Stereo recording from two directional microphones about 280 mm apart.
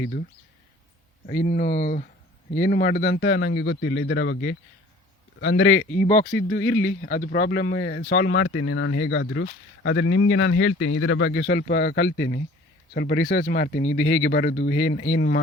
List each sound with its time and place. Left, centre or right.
0.0 s speech: left
1.3 s speech: left